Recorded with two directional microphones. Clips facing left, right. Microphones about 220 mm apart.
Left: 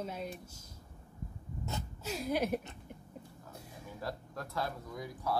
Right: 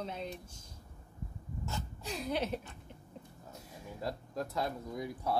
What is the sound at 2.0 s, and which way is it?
Speech, 5° left (ahead or behind).